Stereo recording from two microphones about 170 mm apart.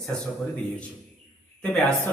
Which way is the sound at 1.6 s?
5° left (ahead or behind).